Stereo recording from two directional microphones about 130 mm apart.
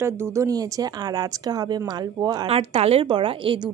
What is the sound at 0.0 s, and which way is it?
A woman's voice, 20° right (ahead or behind).